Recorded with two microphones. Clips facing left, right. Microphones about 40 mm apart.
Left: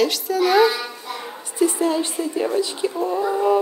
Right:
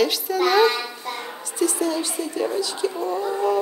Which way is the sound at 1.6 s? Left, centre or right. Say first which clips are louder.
Left 3 dB; left.